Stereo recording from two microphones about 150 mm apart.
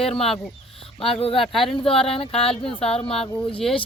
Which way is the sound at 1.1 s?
40° left (ahead or behind).